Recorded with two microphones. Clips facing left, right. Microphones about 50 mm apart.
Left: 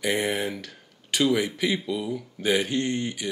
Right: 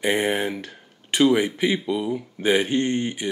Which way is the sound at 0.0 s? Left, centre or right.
Right.